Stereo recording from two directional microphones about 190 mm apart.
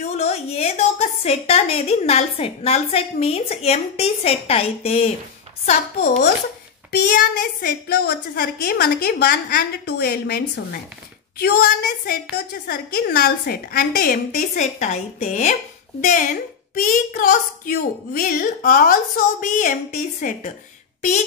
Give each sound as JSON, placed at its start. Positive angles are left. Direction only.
{"t": 0.0, "sound": "a woman's voice", "side_deg": 35}
{"t": 6.9, "sound": "a woman's voice", "side_deg": 55}